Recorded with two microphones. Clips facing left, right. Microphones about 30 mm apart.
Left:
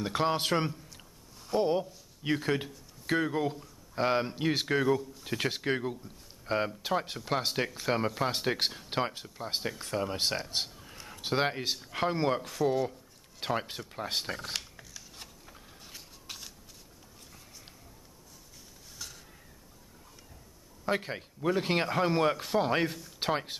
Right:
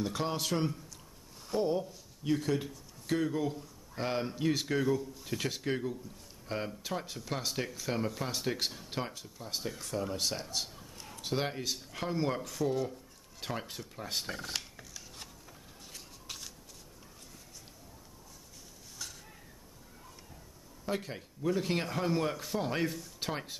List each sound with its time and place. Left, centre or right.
0.0 s a man's voice: left
11.0 s a man's voice: left
14.5 s a sound: centre
20.8 s a man's voice: left